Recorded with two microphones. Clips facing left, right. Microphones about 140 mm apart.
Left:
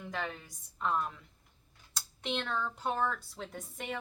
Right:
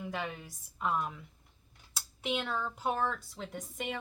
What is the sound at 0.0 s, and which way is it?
Speech, 5° right (ahead or behind).